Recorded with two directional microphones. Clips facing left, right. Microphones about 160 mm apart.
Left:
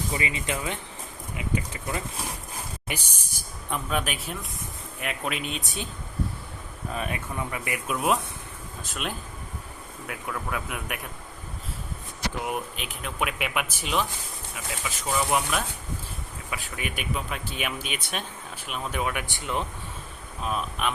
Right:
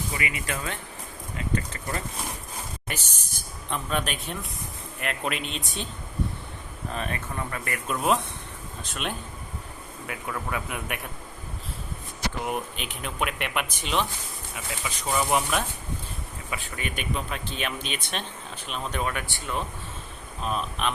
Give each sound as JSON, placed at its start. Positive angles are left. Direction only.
{"t": 0.2, "sound": "speech", "side_deg": 25}
{"t": 6.9, "sound": "speech", "side_deg": 10}
{"t": 12.4, "sound": "speech", "side_deg": 0}
{"t": 19.3, "sound": "speech", "side_deg": 20}
{"t": 20.4, "sound": "speech", "side_deg": 5}